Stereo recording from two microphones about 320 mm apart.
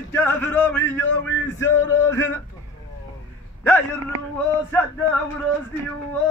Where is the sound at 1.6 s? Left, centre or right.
Centre.